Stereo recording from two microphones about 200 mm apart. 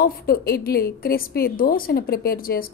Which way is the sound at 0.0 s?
50° left (ahead or behind).